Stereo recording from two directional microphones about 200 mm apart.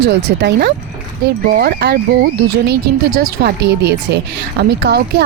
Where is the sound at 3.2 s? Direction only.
50° right (ahead or behind).